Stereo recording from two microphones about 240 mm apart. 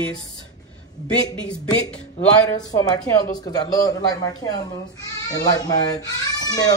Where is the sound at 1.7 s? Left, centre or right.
Centre.